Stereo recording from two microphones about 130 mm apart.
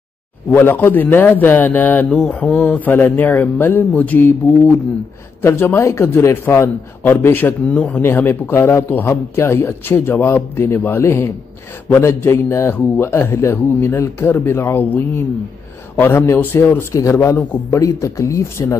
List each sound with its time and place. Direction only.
0.5 s a man's voice: 15° left (ahead or behind)